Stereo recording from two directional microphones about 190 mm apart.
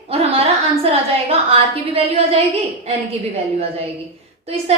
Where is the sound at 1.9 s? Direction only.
30° right (ahead or behind).